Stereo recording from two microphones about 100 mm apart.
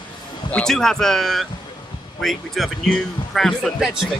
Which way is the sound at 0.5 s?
10° left (ahead or behind).